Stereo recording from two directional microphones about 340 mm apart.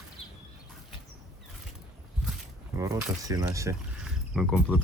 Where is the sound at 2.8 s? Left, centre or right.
Centre.